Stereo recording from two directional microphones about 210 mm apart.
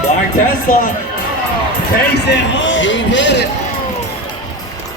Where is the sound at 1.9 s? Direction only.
55° left (ahead or behind).